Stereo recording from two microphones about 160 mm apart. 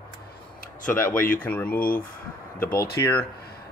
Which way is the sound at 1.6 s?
65° left (ahead or behind).